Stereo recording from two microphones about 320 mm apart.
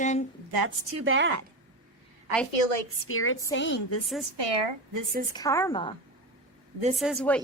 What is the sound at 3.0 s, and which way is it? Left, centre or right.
Speech, left.